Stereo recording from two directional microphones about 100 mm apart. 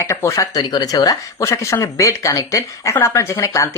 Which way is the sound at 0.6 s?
45° left (ahead or behind).